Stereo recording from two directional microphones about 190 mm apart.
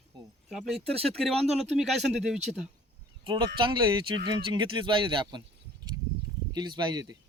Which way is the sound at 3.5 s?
25° right (ahead or behind).